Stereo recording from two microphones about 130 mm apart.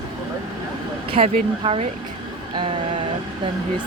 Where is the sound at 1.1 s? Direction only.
45° right (ahead or behind).